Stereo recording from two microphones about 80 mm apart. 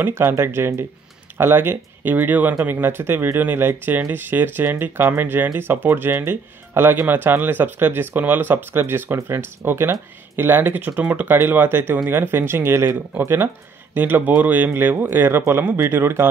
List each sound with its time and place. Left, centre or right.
0.0 s speech: right